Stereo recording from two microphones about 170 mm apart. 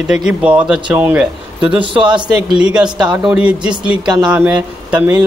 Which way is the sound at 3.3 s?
5° right (ahead or behind).